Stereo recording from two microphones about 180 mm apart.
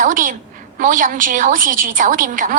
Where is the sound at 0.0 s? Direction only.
50° right (ahead or behind).